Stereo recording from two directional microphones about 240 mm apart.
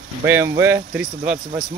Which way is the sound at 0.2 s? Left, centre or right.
Centre.